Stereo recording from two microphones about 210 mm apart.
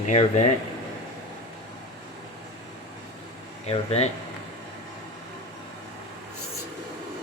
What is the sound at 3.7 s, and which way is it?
Speech, 30° left (ahead or behind).